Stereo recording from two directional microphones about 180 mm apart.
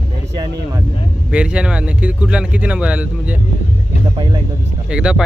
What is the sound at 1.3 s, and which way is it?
Speech, 5° right (ahead or behind).